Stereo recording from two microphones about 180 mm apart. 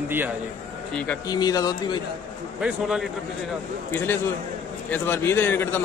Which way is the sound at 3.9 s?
15° left (ahead or behind).